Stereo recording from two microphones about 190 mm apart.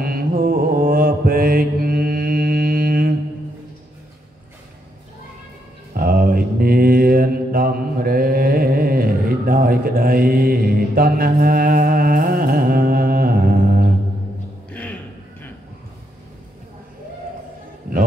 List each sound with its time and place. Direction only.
0.0 s mantra: 50° right (ahead or behind)
5.9 s mantra: 50° right (ahead or behind)
14.7 s a sound: 10° left (ahead or behind)